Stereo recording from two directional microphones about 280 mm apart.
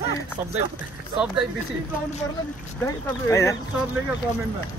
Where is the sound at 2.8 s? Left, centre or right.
Centre.